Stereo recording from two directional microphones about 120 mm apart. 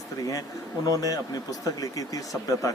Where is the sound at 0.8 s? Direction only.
30° left (ahead or behind).